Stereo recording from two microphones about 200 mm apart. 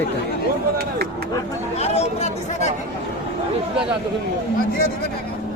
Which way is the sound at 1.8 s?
30° left (ahead or behind).